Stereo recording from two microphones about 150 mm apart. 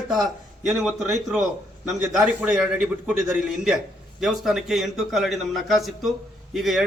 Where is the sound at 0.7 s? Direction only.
Centre (ahead or behind).